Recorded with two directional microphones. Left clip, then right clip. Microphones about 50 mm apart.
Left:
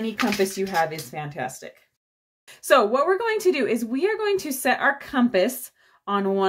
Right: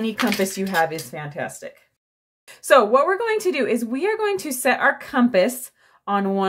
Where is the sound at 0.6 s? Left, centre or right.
Right.